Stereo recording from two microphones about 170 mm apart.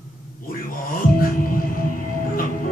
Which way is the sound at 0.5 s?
55° left (ahead or behind).